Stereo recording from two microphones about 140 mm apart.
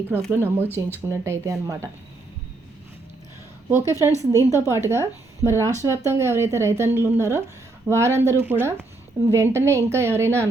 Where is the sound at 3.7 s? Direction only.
20° right (ahead or behind).